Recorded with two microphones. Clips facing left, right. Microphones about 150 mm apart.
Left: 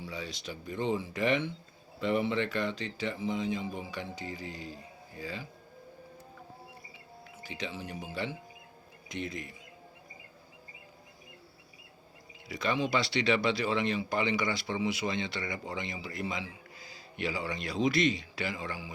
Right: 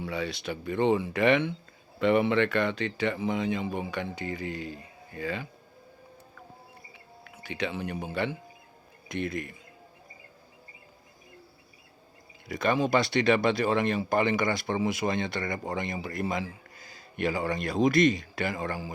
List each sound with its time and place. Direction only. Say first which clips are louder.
0.0 s speech: right 7 dB; 65° right (ahead or behind)
7.3 s speech: right 7 dB; 65° right (ahead or behind)
12.5 s speech: right 5 dB; 50° right (ahead or behind)